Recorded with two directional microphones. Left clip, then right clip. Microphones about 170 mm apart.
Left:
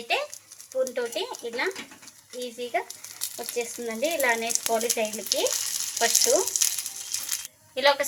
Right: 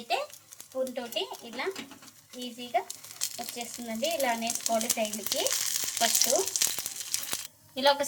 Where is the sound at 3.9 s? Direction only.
40° left (ahead or behind).